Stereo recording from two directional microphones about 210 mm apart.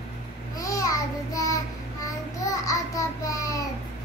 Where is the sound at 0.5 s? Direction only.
15° left (ahead or behind).